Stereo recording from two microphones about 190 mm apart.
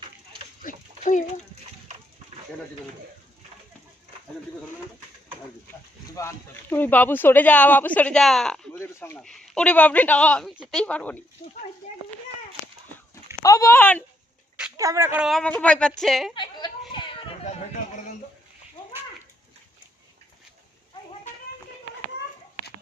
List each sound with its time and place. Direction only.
0.6 s a sound: 45° left (ahead or behind)
6.1 s speech: 10° left (ahead or behind)
11.4 s speech: 35° left (ahead or behind)
13.4 s speech: 15° left (ahead or behind)
14.8 s speech: 15° right (ahead or behind); by 16.3 s centre (ahead or behind)
16.3 s a sound: 25° left (ahead or behind)
16.9 s children playing: 25° left (ahead or behind)